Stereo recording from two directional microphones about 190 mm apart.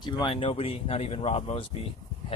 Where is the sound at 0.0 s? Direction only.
25° left (ahead or behind).